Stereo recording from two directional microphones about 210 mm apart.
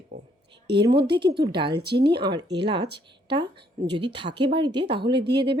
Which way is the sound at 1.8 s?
55° right (ahead or behind).